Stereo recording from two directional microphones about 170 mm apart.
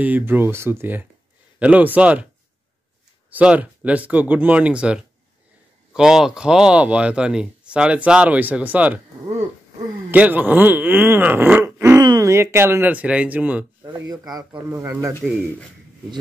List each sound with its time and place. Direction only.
0.0 s speech: 10° right (ahead or behind)
3.3 s speech: 10° right (ahead or behind)
10.1 s speech: 10° right (ahead or behind)